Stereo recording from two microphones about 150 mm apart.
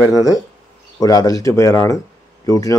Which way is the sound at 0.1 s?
25° left (ahead or behind).